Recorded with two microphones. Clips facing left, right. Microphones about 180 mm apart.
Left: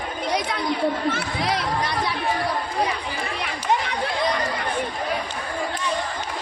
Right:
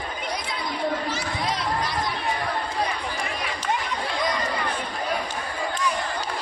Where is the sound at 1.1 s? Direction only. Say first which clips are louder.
Left 3 dB; 65° left (ahead or behind).